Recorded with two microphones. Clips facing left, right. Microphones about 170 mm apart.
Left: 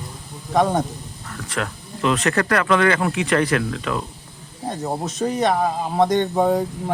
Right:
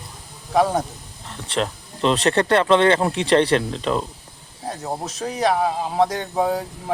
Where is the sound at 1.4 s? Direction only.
30° right (ahead or behind).